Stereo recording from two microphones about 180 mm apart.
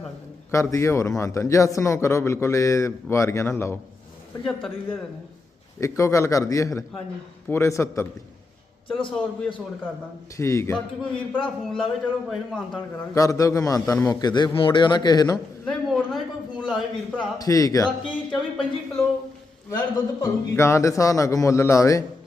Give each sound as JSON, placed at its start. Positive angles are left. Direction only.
{"t": 0.5, "sound": "a man's voice", "side_deg": 15}
{"t": 5.8, "sound": "a man's voice", "side_deg": 15}
{"t": 8.9, "sound": "a man's voice", "side_deg": 30}
{"t": 10.3, "sound": "a man's voice", "side_deg": 15}
{"t": 13.1, "sound": "a man's voice", "side_deg": 20}
{"t": 15.6, "sound": "a sound", "side_deg": 5}
{"t": 17.3, "sound": "a man's voice", "side_deg": 20}
{"t": 18.1, "sound": "speech", "side_deg": 5}
{"t": 20.2, "sound": "a man's voice", "side_deg": 15}